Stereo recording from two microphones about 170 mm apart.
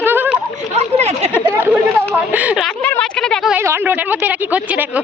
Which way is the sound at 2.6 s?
5° left (ahead or behind).